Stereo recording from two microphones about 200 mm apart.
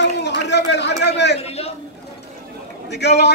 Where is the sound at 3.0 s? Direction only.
55° left (ahead or behind).